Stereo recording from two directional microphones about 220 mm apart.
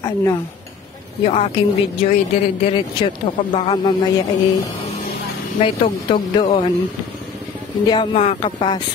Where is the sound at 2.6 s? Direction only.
25° left (ahead or behind).